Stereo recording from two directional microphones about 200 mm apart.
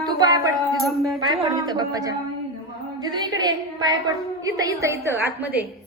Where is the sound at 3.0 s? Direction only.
20° right (ahead or behind).